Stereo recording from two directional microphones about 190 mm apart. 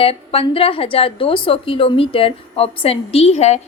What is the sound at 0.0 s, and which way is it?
A woman's voice, 30° left (ahead or behind).